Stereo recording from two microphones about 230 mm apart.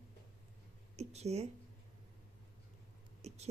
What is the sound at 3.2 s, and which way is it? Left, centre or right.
Speech, right.